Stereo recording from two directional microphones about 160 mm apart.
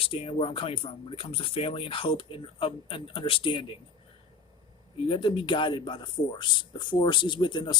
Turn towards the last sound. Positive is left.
turn(degrees=30)  # may be behind; listen again after turning